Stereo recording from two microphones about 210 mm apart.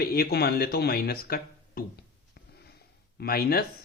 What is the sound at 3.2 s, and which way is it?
Speech, 45° left (ahead or behind).